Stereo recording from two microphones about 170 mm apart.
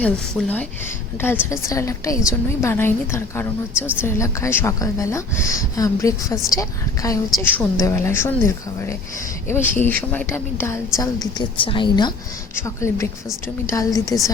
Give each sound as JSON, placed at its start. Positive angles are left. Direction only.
{"t": 0.0, "sound": "a woman's voice", "side_deg": 5}
{"t": 1.6, "sound": "a woman's voice", "side_deg": 15}
{"t": 12.5, "sound": "a woman's voice", "side_deg": 15}